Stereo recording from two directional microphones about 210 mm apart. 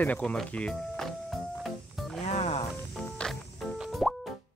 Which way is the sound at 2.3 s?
30° left (ahead or behind).